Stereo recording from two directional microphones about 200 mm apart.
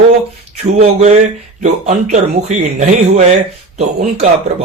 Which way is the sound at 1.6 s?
35° right (ahead or behind).